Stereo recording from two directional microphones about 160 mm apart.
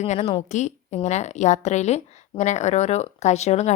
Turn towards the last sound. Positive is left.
turn(degrees=45)  # may be behind; listen again after turning